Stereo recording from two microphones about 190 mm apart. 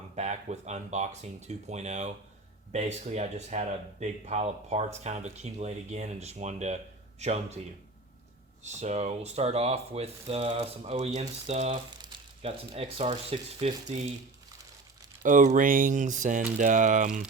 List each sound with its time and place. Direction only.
0.2 s speech: 35° right (ahead or behind)
8.6 s speech: 35° right (ahead or behind)
15.2 s speech: 40° right (ahead or behind)